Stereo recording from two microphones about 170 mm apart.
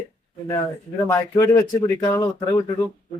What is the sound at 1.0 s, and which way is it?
Speech, 15° left (ahead or behind).